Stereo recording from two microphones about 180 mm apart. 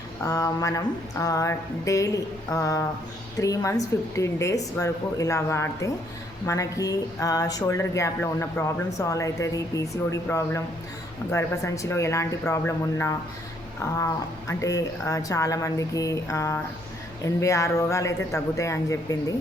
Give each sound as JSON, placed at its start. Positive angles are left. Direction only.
{"t": 0.3, "sound": "a woman's voice", "side_deg": 15}